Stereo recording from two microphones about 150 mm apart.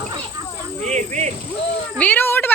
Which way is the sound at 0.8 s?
50° right (ahead or behind).